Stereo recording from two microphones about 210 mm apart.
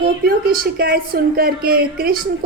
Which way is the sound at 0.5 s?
45° right (ahead or behind).